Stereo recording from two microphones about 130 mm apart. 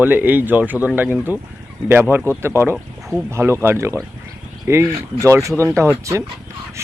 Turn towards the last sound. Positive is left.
turn(degrees=-20)  # may be behind; listen again after turning